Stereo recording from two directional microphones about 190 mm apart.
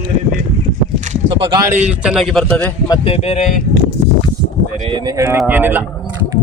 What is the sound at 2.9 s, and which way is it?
Speech, 30° left (ahead or behind).